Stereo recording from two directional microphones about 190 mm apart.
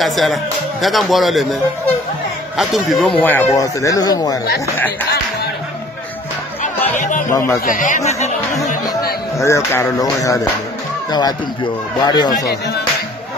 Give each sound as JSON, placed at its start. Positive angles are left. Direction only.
{"t": 0.0, "sound": "speech", "side_deg": 0}
{"t": 7.0, "sound": "speech", "side_deg": 45}
{"t": 7.3, "sound": "speech", "side_deg": 15}
{"t": 7.6, "sound": "speech", "side_deg": 45}
{"t": 9.4, "sound": "speech", "side_deg": 15}